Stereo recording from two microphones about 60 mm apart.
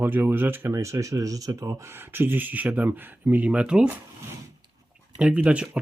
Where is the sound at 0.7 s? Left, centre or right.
Right.